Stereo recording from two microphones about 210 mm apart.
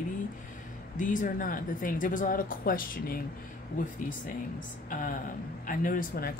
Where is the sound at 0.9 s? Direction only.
40° left (ahead or behind).